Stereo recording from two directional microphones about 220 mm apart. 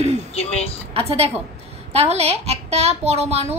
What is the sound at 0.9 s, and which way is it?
A woman's voice, 25° right (ahead or behind).